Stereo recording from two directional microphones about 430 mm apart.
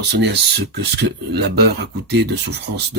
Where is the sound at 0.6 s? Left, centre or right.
Right.